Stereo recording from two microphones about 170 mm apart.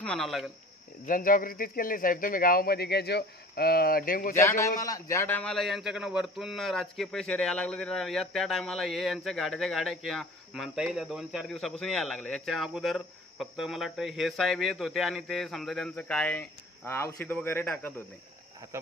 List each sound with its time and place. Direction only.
0.0 s speech: 5° left (ahead or behind)
1.0 s speech: 55° left (ahead or behind)
4.4 s a man's voice: 15° left (ahead or behind)